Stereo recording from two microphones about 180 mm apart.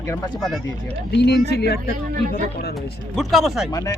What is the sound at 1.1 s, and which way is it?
Speech, 70° left (ahead or behind).